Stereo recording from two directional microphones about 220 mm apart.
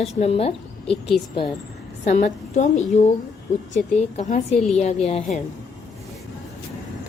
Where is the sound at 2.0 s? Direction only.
30° left (ahead or behind).